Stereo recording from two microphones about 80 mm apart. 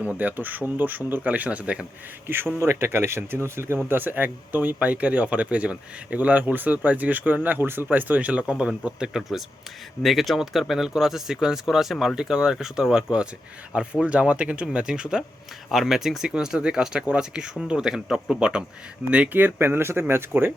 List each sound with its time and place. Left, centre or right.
0.0 s speech: centre
2.2 s speech: right